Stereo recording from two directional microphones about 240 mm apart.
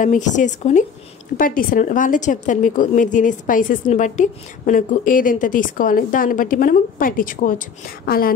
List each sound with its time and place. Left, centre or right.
0.0 s a woman's voice: left